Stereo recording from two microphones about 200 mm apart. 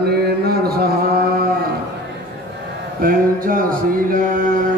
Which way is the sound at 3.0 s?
45° right (ahead or behind).